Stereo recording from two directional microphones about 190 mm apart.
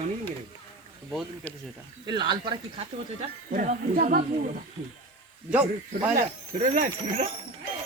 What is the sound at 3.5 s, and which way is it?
Speech, 45° right (ahead or behind).